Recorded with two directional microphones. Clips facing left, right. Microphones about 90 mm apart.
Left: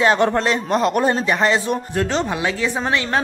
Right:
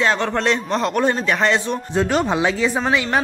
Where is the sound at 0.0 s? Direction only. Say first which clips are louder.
Left 3 dB; 15° left (ahead or behind).